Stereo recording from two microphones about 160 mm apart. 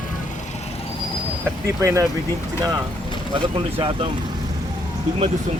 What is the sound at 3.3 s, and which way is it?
Speech, 35° right (ahead or behind).